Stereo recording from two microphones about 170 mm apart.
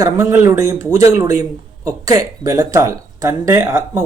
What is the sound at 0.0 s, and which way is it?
Speech, 20° right (ahead or behind).